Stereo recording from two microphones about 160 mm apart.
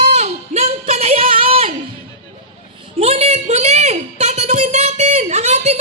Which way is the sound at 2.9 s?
40° right (ahead or behind).